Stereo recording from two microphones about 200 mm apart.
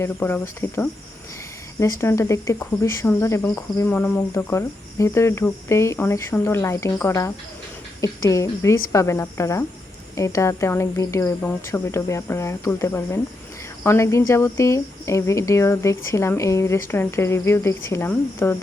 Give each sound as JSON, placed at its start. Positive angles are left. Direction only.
{"t": 0.0, "sound": "speech", "side_deg": 10}